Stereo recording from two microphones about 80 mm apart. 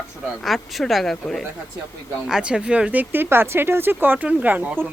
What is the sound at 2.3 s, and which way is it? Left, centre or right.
A man's voice, centre.